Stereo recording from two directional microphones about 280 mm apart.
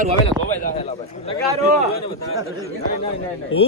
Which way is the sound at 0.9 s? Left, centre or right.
Left.